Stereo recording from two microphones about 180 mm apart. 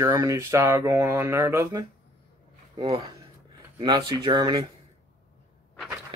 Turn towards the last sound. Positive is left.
turn(degrees=-20)  # may be behind; listen again after turning